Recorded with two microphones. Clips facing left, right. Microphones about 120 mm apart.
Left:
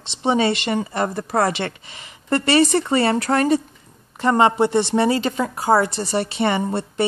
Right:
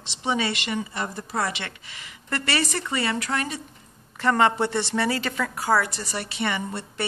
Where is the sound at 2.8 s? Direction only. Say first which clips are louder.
Left 8 dB; 35° left (ahead or behind).